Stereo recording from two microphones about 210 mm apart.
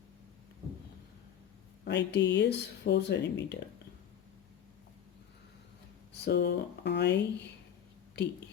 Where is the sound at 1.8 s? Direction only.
55° left (ahead or behind).